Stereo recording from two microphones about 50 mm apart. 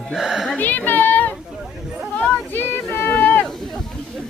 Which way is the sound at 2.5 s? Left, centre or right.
Left.